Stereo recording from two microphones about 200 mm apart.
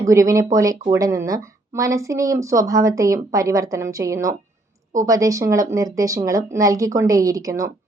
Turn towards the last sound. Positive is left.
turn(degrees=-15)  # may be behind; listen again after turning